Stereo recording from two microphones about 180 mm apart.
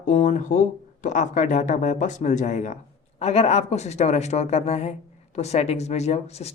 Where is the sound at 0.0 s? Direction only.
40° left (ahead or behind).